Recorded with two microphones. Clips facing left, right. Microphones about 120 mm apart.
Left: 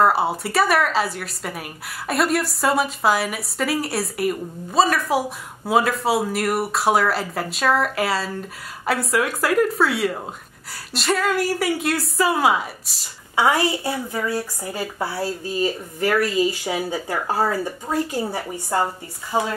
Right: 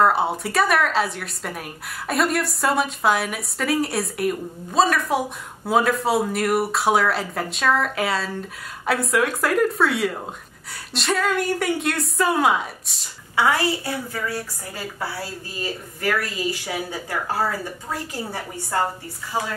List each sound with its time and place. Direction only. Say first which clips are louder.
0.0 s a woman's voice: left 1 dB; centre (ahead or behind)
13.4 s a woman's voice: left 1 dB; 15° left (ahead or behind)